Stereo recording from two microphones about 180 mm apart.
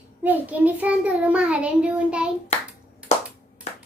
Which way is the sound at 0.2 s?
10° right (ahead or behind).